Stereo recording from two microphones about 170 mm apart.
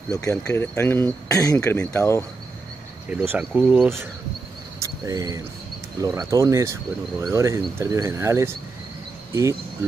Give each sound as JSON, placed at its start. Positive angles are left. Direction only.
{"t": 0.2, "sound": "speech", "side_deg": 20}
{"t": 3.1, "sound": "speech", "side_deg": -5}
{"t": 4.7, "sound": "cricket", "side_deg": -20}
{"t": 5.9, "sound": "speech", "side_deg": -20}